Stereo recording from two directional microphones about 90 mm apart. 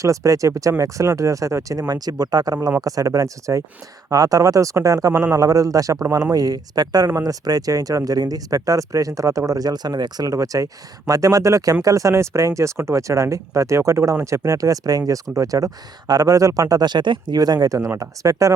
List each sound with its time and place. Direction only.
0.0 s speech: 35° right (ahead or behind)